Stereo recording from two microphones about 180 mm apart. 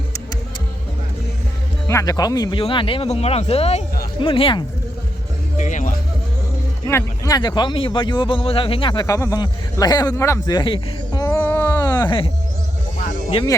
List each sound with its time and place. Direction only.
1.9 s speech: 20° left (ahead or behind)
5.5 s music: 45° left (ahead or behind)
6.8 s speech: 15° left (ahead or behind)
11.2 s music: 10° left (ahead or behind)
13.3 s speech: 20° left (ahead or behind)